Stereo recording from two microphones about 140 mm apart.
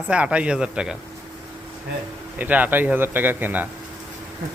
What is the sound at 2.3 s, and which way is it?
A man's voice, 10° right (ahead or behind).